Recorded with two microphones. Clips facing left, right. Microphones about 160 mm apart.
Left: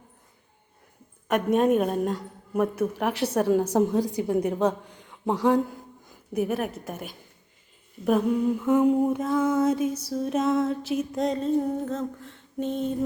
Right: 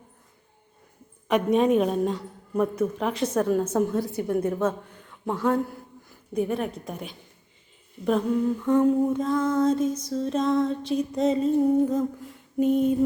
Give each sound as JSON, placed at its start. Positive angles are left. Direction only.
{"t": 1.3, "sound": "music", "side_deg": 0}
{"t": 3.5, "sound": "a woman's voice", "side_deg": 15}
{"t": 6.3, "sound": "music", "side_deg": 5}
{"t": 8.0, "sound": "humming", "side_deg": 10}
{"t": 9.2, "sound": "music", "side_deg": 10}